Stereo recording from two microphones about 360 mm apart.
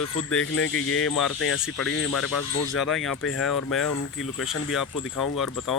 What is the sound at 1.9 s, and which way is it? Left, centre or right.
Speech, left.